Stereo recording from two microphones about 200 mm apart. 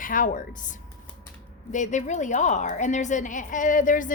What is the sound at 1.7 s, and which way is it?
A woman's voice, 35° left (ahead or behind).